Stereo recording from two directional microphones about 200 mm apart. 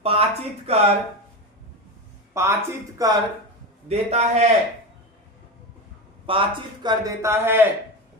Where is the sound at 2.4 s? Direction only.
15° right (ahead or behind).